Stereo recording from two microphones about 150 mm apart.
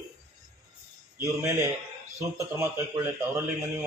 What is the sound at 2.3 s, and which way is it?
Speech, 20° right (ahead or behind).